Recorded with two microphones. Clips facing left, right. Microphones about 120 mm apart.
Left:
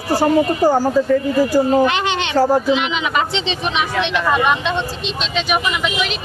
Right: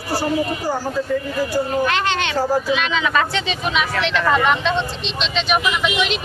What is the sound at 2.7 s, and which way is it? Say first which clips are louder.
Speech: left 2 dB; 20° left (ahead or behind).